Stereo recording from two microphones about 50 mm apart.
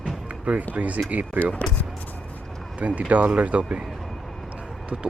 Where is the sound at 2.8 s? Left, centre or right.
Right.